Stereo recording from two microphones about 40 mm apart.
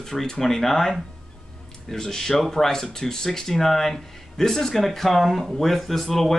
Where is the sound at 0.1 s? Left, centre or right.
Centre.